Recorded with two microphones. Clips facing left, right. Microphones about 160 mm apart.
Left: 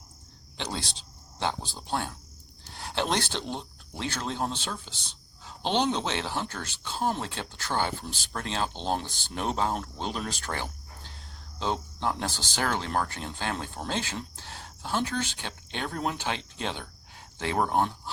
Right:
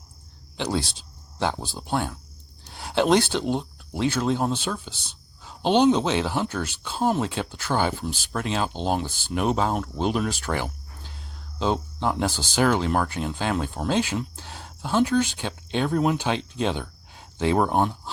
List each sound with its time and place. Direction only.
0.5 s speech: 5° right (ahead or behind)